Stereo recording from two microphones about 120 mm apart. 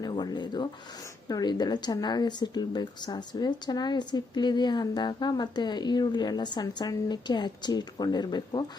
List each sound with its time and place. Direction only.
0.0 s speech: 35° left (ahead or behind)